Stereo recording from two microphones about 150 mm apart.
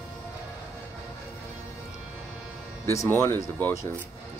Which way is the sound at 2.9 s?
15° left (ahead or behind).